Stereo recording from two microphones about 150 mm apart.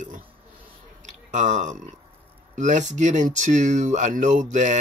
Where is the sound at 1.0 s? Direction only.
55° right (ahead or behind).